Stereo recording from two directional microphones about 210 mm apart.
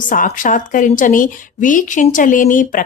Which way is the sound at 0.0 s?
40° left (ahead or behind).